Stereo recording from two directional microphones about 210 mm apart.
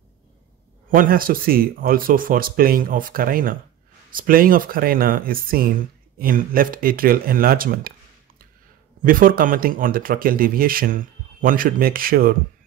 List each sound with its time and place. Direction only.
0.9 s speech: 45° right (ahead or behind)
9.0 s speech: 40° right (ahead or behind)